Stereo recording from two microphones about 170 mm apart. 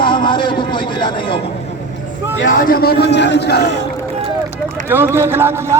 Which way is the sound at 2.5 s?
55° left (ahead or behind).